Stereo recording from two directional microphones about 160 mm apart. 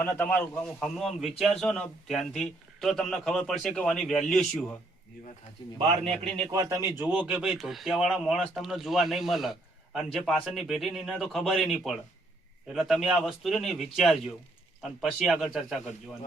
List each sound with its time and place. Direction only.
0.0 s speech: 10° left (ahead or behind)
5.9 s a man's voice: 40° right (ahead or behind)
6.5 s speech: 20° right (ahead or behind); by 15.8 s centre (ahead or behind)